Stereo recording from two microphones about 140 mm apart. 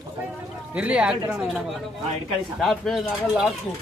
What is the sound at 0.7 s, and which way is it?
Speech, 10° right (ahead or behind).